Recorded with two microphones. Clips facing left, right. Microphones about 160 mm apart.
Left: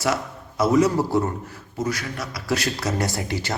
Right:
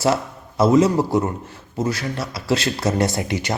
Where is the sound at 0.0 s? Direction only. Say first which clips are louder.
Right 4 dB; 25° right (ahead or behind).